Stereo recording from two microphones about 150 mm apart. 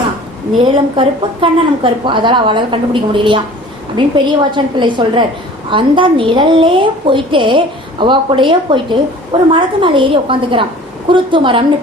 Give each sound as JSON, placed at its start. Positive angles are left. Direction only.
{"t": 0.6, "sound": "a woman's voice", "side_deg": -35}